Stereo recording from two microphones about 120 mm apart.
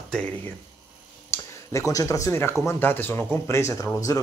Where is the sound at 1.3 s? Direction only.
25° left (ahead or behind).